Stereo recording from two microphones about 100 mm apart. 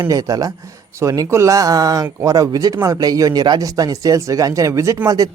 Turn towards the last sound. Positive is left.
turn(degrees=-35)  # may be behind; listen again after turning